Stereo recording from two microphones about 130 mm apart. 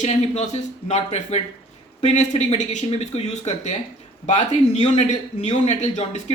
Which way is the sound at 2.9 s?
55° left (ahead or behind).